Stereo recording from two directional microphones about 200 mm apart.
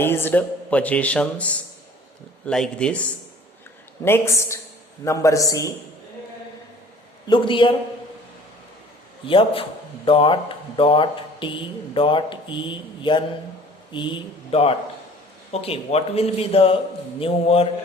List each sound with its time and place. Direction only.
0.0 s a man's voice: 10° left (ahead or behind)
7.3 s speech: 25° left (ahead or behind)
9.2 s speech: 25° left (ahead or behind)